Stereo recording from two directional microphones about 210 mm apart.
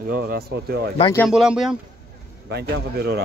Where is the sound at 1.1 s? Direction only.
Centre (ahead or behind).